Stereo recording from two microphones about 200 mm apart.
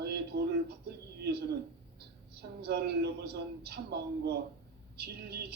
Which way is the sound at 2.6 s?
55° right (ahead or behind).